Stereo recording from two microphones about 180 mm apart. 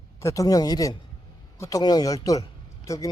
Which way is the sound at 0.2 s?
15° left (ahead or behind).